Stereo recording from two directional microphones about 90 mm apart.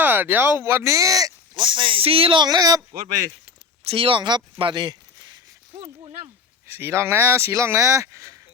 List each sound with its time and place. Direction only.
0.0 s speech: 20° right (ahead or behind); by 1.3 s 40° right (ahead or behind)
1.5 s speech: 65° right (ahead or behind); by 2.4 s 90° right
2.4 s speech: 45° right (ahead or behind)
3.9 s speech: 80° right; by 4.9 s 60° right (ahead or behind)
6.7 s speech: 30° right (ahead or behind)